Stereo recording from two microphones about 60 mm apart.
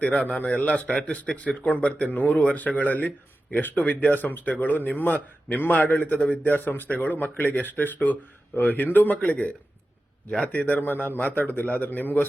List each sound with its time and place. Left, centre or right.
0.1 s a man's voice: left
9.2 s a man's voice: centre